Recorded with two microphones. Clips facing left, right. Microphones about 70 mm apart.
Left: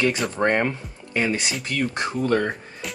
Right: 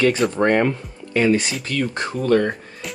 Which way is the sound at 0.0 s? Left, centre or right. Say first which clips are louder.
Right 4 dB; centre.